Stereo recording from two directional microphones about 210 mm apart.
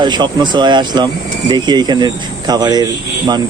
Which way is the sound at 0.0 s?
20° right (ahead or behind).